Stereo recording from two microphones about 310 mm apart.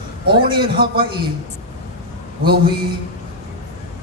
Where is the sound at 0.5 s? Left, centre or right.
Right.